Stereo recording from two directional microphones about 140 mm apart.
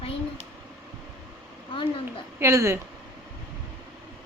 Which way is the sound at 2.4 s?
20° right (ahead or behind).